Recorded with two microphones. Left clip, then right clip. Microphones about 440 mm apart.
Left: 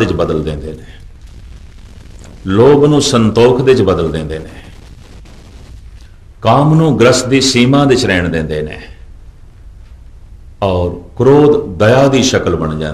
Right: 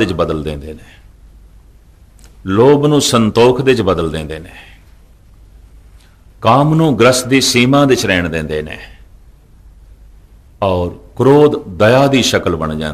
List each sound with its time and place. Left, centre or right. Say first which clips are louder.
0.0 s a man's voice: left 2 dB; right
2.2 s a man's voice: left 1 dB; right
6.4 s a man's voice: left 1 dB; right
10.6 s a man's voice: left 1 dB; right